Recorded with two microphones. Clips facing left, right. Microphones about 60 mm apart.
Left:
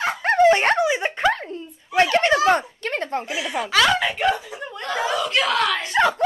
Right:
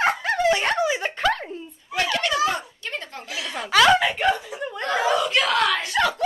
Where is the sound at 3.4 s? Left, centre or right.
Centre.